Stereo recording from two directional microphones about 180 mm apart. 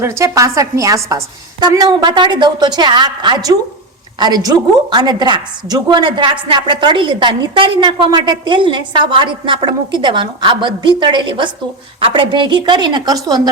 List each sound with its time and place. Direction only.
0.0 s a woman's voice: 15° right (ahead or behind)